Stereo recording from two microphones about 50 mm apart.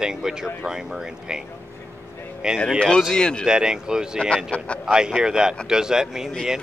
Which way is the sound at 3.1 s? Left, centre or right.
Centre.